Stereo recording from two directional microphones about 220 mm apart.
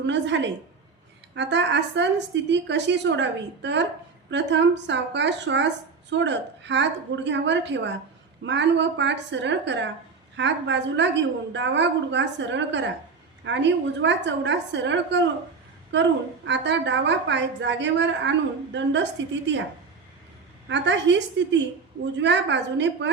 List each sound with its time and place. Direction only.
0.0 s a woman's voice: 55° right (ahead or behind)
20.7 s a woman's voice: 55° right (ahead or behind)